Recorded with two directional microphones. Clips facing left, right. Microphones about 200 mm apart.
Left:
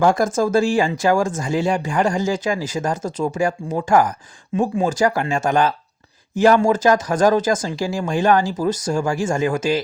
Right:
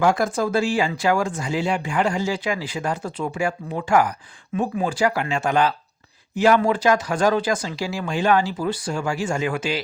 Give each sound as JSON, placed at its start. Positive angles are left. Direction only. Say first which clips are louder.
{"t": 0.1, "sound": "speech", "louder": "left 4 dB", "side_deg": 45}
{"t": 4.5, "sound": "speech", "louder": "left 4 dB", "side_deg": 25}
{"t": 4.9, "sound": "speech", "louder": "left 3 dB", "side_deg": 45}